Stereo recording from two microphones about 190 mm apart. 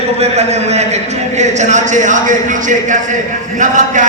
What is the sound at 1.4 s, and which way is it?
A man's voice, 40° right (ahead or behind).